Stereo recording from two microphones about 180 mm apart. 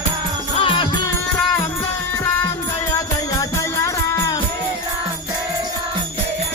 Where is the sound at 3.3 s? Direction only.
20° left (ahead or behind).